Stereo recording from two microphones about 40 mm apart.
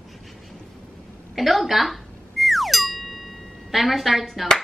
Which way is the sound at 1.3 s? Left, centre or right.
Centre.